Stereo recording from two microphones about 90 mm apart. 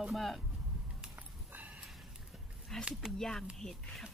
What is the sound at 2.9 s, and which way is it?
Speech, 5° right (ahead or behind).